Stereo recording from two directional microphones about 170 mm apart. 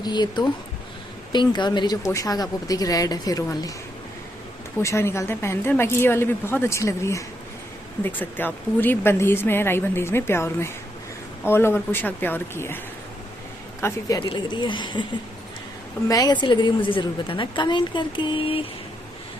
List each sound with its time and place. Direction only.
0.0 s a woman's voice: 25° left (ahead or behind)
4.8 s speech: 15° left (ahead or behind)
13.8 s a woman's voice: 20° left (ahead or behind)
16.0 s a woman's voice: 20° left (ahead or behind)